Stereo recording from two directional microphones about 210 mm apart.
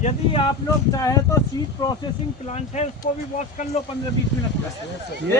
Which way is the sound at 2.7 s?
30° left (ahead or behind).